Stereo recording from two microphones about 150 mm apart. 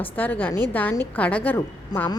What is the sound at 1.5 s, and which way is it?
Speech, 20° left (ahead or behind).